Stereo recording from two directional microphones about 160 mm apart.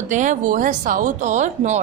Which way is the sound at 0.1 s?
50° right (ahead or behind).